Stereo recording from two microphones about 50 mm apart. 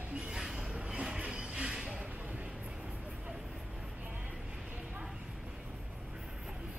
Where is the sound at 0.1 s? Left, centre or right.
Right.